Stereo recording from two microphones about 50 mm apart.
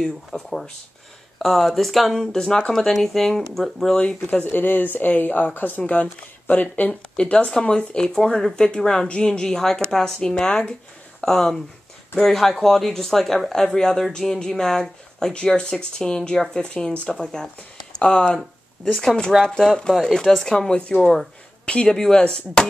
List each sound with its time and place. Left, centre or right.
0.0 s speech: centre
3.9 s speech: centre
4.2 s speech: left
5.8 s speech: left
6.9 s speech: centre
21.6 s speech: left
21.9 s speech: centre